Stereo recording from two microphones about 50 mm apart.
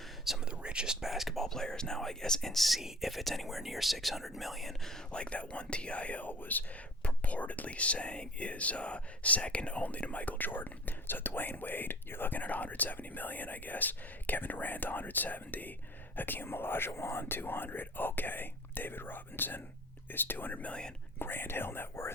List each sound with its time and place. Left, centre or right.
0.5 s whispering: centre
1.0 s speech: centre
5.1 s speech: left
20.6 s speech: left
21.2 s speech: left